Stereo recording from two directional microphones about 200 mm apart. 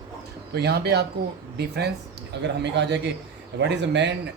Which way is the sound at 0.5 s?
55° right (ahead or behind).